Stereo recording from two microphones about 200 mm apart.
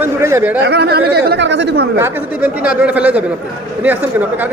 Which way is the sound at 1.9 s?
10° right (ahead or behind).